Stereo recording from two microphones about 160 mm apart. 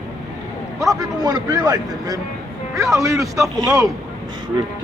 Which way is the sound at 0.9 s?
25° right (ahead or behind).